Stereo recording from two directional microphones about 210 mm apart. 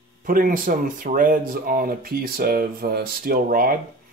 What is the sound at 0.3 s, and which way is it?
Speech, 40° right (ahead or behind).